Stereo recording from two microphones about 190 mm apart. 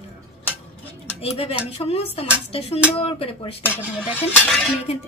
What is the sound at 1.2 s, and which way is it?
A woman's voice, 30° left (ahead or behind).